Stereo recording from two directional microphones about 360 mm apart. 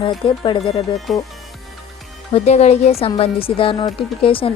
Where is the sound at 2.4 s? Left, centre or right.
Centre.